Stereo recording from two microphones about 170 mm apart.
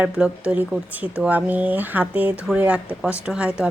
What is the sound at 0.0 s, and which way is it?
Speech, 10° right (ahead or behind).